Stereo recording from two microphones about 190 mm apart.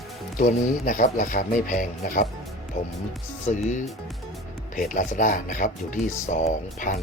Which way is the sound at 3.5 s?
40° left (ahead or behind).